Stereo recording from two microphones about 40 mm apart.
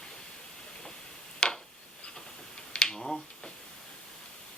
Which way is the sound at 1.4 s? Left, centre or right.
Centre.